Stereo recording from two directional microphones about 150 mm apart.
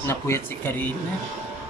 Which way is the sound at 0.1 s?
15° left (ahead or behind).